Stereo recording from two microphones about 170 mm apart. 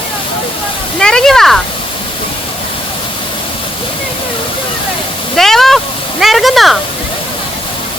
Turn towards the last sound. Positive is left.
turn(degrees=0)  # may be behind; listen again after turning